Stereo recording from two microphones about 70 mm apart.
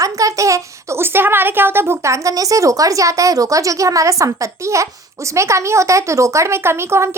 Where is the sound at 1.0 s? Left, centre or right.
Right.